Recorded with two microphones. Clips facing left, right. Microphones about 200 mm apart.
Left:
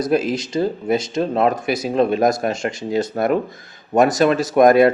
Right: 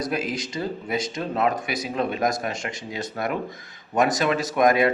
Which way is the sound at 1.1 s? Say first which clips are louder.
Left 4 dB; 30° left (ahead or behind).